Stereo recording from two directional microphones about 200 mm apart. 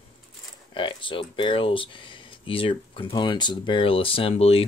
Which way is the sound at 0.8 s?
25° left (ahead or behind).